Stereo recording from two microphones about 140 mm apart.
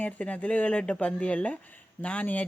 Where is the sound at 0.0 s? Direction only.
10° left (ahead or behind).